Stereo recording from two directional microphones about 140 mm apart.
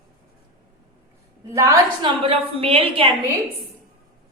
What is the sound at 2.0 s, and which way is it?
A woman's voice, 40° right (ahead or behind).